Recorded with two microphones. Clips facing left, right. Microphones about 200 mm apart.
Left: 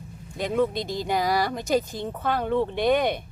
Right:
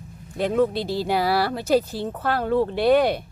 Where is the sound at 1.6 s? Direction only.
15° left (ahead or behind).